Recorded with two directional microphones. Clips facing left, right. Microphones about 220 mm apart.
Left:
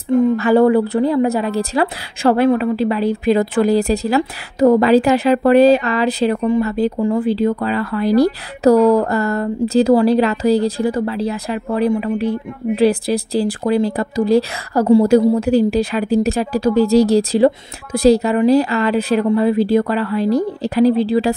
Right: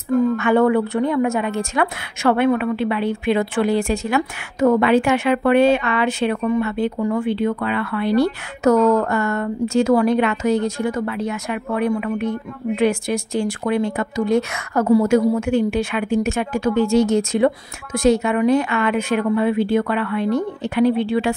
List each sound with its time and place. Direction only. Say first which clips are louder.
0.2 s speech: left 4 dB; 30° left (ahead or behind)